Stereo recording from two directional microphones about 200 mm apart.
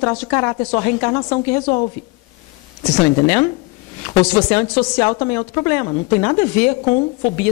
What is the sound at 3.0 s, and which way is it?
Speech, 10° left (ahead or behind).